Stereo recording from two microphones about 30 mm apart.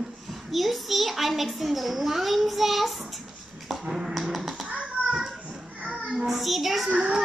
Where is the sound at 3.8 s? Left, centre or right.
Centre.